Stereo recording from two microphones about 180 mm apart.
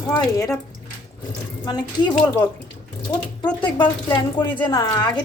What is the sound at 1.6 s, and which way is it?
Speech, 20° left (ahead or behind).